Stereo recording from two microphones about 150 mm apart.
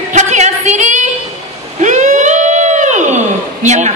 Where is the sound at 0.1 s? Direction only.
50° right (ahead or behind).